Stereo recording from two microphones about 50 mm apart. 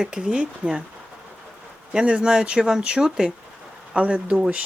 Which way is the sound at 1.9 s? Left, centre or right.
Centre.